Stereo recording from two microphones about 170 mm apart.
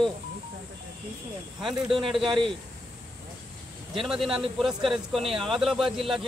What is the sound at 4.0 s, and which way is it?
A man's voice, centre (ahead or behind).